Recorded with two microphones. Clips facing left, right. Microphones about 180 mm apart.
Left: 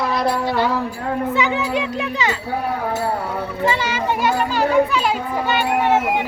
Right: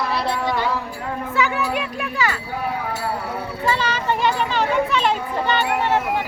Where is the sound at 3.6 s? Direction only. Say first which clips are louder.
Left 1 dB; 15° left (ahead or behind).